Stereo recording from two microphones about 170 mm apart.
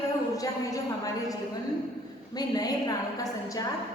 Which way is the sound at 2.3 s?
20° left (ahead or behind).